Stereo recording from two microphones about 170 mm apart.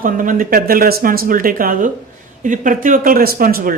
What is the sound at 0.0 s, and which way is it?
Speech, 50° right (ahead or behind).